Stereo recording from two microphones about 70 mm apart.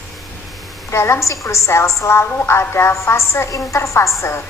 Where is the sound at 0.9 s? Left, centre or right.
Left.